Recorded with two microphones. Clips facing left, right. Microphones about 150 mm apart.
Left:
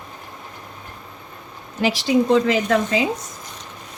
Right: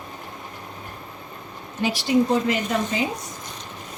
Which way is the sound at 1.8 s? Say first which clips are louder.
Left 2 dB; 90° left.